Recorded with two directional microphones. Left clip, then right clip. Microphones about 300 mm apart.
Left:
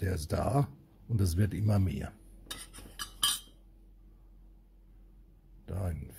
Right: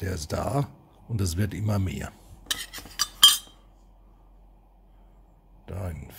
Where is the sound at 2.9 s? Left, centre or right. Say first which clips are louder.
Right 15 dB; centre.